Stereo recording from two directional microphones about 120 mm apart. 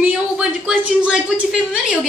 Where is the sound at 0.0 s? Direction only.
10° right (ahead or behind).